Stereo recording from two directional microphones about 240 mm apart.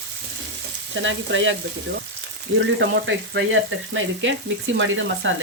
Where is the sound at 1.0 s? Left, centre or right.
Right.